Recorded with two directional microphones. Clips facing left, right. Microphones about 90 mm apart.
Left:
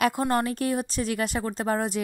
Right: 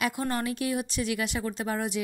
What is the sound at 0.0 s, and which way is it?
Speech, 40° left (ahead or behind).